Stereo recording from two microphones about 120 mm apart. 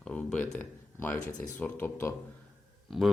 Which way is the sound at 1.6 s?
15° left (ahead or behind).